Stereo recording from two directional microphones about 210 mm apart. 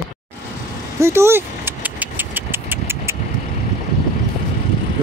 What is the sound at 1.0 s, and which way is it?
Vehicle, 10° right (ahead or behind).